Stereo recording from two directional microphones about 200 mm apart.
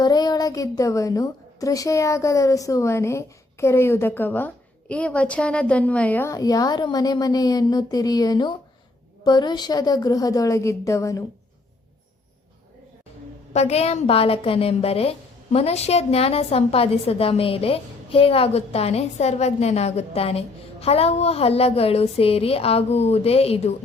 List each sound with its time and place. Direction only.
0.0 s a woman's voice: 20° left (ahead or behind)
13.5 s a woman's voice: 30° left (ahead or behind)